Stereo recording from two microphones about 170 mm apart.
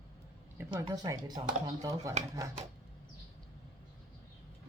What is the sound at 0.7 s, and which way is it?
Speech, 20° right (ahead or behind).